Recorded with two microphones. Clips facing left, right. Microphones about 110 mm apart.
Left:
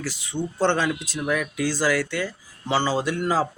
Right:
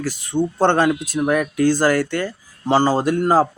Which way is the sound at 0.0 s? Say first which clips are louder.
Right 8 dB; 50° right (ahead or behind).